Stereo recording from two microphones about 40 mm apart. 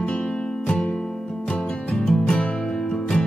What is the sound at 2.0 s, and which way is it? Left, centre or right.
Music, centre.